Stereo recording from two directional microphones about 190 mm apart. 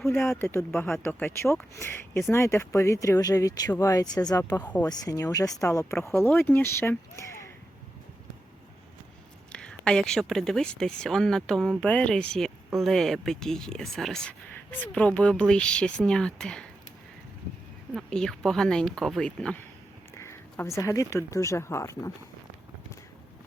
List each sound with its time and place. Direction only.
0.0 s speech: 5° left (ahead or behind)
4.9 s speech: 20° left (ahead or behind)
9.5 s speech: 5° left (ahead or behind)
17.9 s speech: 5° left (ahead or behind)